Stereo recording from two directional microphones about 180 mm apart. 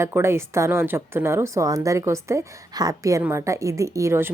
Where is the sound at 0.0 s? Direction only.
15° right (ahead or behind).